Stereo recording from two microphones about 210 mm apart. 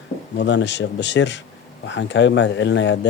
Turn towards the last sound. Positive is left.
turn(degrees=60)  # may be behind; listen again after turning